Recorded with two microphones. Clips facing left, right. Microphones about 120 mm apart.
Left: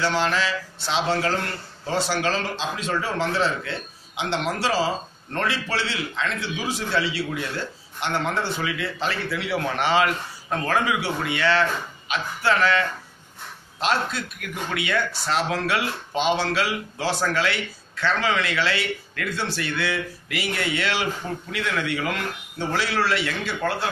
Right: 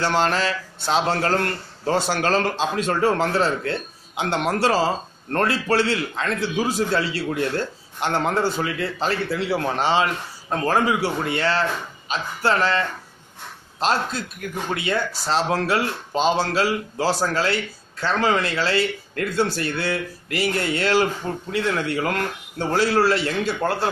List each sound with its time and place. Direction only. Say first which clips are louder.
0.0 s a man's voice: right 2 dB; 45° right (ahead or behind)